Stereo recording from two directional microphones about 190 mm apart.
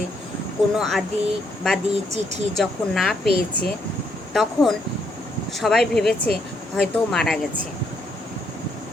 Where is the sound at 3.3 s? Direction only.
55° left (ahead or behind).